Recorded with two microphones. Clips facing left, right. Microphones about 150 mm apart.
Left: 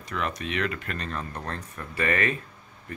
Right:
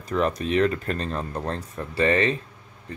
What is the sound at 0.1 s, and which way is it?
Speech, 35° right (ahead or behind).